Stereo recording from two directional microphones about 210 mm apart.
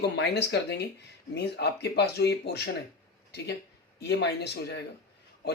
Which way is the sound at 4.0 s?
55° left (ahead or behind).